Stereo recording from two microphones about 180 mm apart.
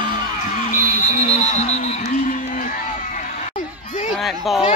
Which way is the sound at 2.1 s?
45° left (ahead or behind).